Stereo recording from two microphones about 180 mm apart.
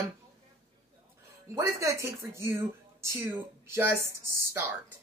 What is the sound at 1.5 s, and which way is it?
Speech, 15° right (ahead or behind).